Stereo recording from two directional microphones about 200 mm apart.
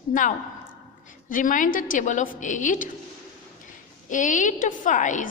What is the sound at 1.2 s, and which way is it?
A woman's voice, 40° left (ahead or behind).